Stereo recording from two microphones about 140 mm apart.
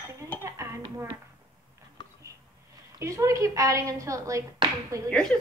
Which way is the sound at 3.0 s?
20° right (ahead or behind).